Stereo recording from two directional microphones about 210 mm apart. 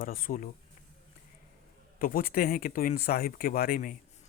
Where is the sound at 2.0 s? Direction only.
45° left (ahead or behind).